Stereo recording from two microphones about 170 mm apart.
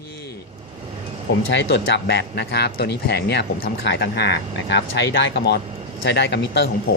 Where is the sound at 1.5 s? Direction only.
90° left.